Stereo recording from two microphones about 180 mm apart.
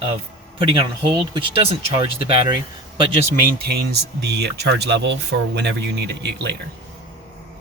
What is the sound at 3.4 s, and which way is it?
Speech, 55° right (ahead or behind).